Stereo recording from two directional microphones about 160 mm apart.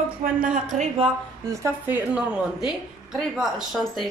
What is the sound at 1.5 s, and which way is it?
A woman's voice, 15° right (ahead or behind).